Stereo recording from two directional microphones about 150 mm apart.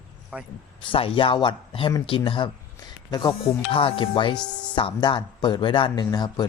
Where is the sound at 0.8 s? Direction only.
35° left (ahead or behind).